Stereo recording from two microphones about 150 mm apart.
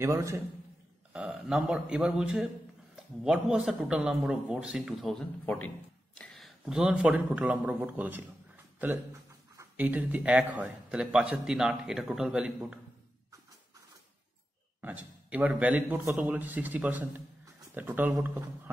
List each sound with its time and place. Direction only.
0.0 s a man's voice: 20° right (ahead or behind)
1.1 s a man's voice: 5° right (ahead or behind)
8.7 s a sound: 10° right (ahead or behind)
9.6 s a man's voice: 10° right (ahead or behind)
14.8 s a man's voice: 10° right (ahead or behind)